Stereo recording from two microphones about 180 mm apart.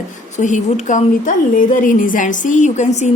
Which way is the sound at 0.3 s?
40° left (ahead or behind).